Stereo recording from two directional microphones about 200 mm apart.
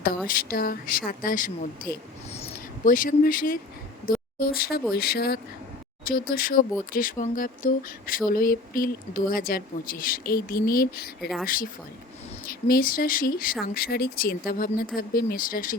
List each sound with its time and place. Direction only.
0.3 s speech: 45° left (ahead or behind)